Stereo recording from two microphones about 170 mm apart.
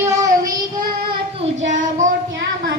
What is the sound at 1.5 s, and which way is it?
Child singing, 45° right (ahead or behind).